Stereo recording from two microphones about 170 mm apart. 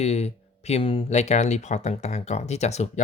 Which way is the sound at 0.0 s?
40° left (ahead or behind).